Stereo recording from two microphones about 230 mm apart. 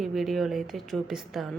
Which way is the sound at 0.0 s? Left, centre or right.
Centre.